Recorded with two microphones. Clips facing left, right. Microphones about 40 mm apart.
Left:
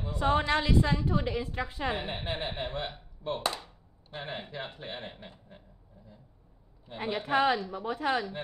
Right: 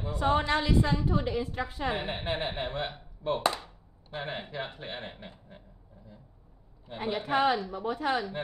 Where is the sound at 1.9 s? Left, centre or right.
Centre.